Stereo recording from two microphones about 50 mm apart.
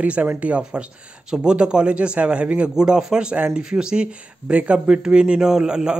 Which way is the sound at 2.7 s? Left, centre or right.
Centre.